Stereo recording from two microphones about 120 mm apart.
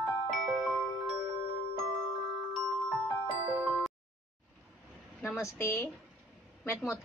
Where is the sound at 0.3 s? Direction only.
5° right (ahead or behind).